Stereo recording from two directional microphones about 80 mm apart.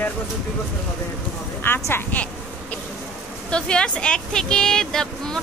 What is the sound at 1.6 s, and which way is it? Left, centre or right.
Speech, left.